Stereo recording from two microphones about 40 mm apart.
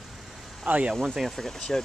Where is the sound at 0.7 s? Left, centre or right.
Right.